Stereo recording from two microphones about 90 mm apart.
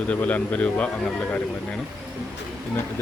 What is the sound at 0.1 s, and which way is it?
Speech, 15° left (ahead or behind).